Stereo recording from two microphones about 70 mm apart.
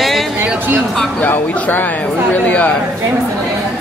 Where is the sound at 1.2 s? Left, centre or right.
Left.